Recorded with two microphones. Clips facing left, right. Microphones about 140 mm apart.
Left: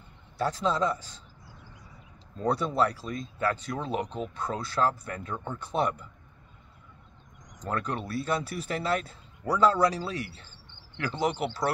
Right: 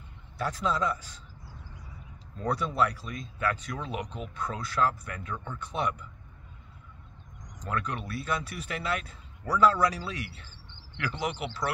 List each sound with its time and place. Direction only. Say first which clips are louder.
0.4 s a man's voice: left 2 dB; 25° left (ahead or behind)
2.3 s speech: left 3 dB; 25° left (ahead or behind)
7.6 s speech: left 2 dB; 30° left (ahead or behind)
11.2 s speech: left 6 dB; 45° left (ahead or behind)